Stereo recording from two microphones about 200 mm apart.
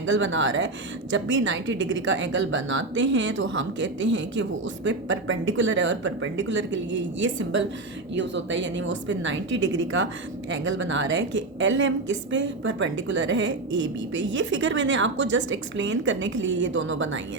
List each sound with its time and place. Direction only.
0.0 s a woman's voice: 70° right (ahead or behind)